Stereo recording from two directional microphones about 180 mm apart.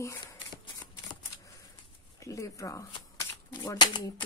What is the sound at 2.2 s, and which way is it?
Speech, 15° left (ahead or behind).